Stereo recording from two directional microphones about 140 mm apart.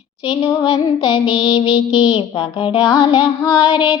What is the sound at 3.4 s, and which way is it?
Child singing, 25° left (ahead or behind).